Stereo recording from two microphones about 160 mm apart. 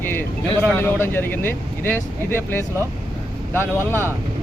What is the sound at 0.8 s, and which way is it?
Speech, 15° left (ahead or behind).